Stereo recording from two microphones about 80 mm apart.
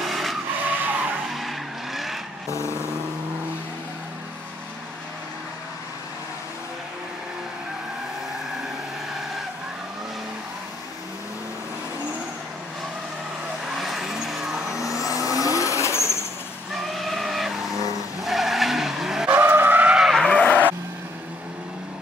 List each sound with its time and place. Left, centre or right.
0.0 s vehicle: centre
0.7 s vehicle: right
1.3 s vehicle: centre
13.7 s vehicle: centre
14.8 s vehicle: left
16.7 s a sound: centre
18.2 s vehicle: centre
19.3 s vehicle: right
20.0 s skidding: centre
20.2 s vehicle: centre